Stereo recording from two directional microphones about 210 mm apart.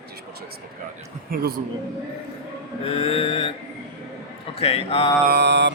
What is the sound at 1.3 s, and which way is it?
Speech, 45° right (ahead or behind).